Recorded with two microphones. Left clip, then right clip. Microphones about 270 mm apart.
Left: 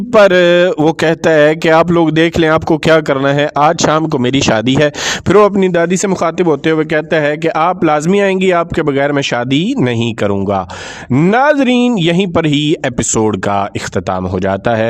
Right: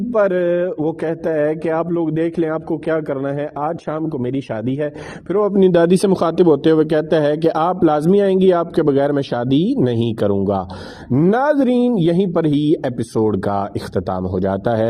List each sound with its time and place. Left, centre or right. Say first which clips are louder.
0.2 s speech: left 9 dB; left
5.5 s a man's voice: left 1 dB; centre
12.5 s speech: left 4 dB; centre
12.7 s speech: left 4 dB; left